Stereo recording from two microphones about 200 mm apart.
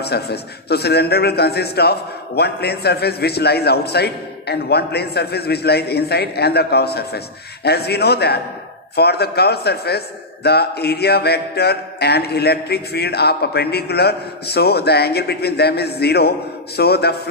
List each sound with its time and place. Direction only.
0.0 s a man's voice: 55° left (ahead or behind)